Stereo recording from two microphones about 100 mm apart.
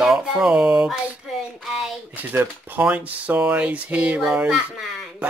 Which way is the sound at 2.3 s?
20° right (ahead or behind).